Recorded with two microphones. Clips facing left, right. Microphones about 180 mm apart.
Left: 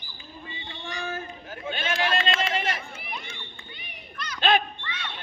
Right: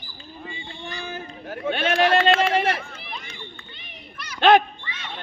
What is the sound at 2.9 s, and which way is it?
Run, 5° left (ahead or behind).